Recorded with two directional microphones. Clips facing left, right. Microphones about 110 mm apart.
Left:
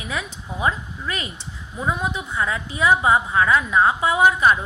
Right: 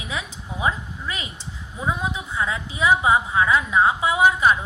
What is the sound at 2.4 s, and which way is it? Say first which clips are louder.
A woman's voice: left 1 dB; 20° right (ahead or behind).